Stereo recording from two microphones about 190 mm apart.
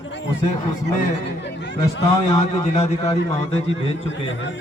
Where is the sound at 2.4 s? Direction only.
35° left (ahead or behind).